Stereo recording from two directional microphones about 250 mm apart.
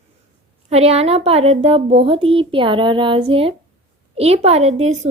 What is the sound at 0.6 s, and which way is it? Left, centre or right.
Speech, right.